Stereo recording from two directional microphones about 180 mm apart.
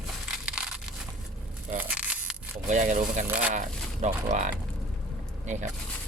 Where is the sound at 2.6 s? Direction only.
45° right (ahead or behind).